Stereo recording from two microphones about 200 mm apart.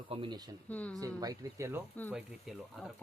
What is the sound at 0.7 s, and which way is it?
Speech, 5° left (ahead or behind).